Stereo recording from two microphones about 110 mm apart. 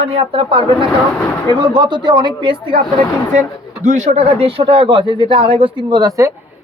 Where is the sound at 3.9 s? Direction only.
85° right; by 6.1 s 45° right (ahead or behind).